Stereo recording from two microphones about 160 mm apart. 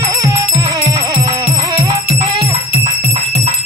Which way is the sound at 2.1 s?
40° right (ahead or behind).